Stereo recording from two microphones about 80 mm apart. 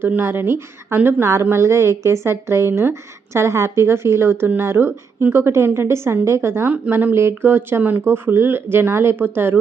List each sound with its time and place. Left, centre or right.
0.1 s speech: right